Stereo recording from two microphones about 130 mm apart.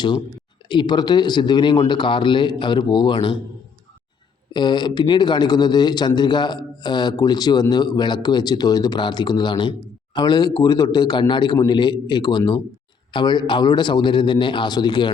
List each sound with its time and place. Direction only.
0.7 s a man's voice: 35° left (ahead or behind)
4.5 s a man's voice: 35° left (ahead or behind)